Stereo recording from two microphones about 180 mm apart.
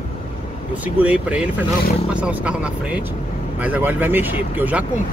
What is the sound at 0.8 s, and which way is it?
Speech, 10° right (ahead or behind).